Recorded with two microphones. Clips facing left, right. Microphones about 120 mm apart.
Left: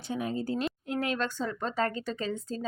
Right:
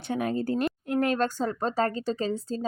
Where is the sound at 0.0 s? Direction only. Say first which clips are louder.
Right 4 dB; 65° right (ahead or behind).